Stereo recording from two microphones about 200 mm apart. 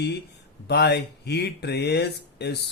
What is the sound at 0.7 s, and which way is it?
Speech, 55° left (ahead or behind).